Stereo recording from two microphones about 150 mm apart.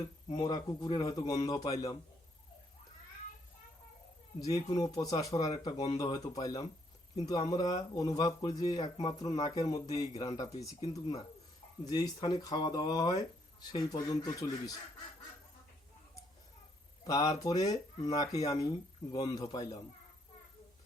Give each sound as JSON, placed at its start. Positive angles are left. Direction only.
{"t": 0.0, "sound": "speech", "side_deg": 25}
{"t": 4.4, "sound": "speech", "side_deg": 25}
{"t": 11.9, "sound": "speech", "side_deg": 25}
{"t": 17.0, "sound": "speech", "side_deg": 25}